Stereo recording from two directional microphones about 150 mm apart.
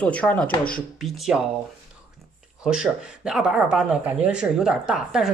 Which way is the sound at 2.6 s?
5° right (ahead or behind).